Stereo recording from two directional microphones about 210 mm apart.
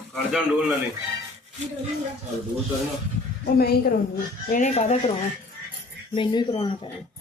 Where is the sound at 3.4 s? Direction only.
45° left (ahead or behind).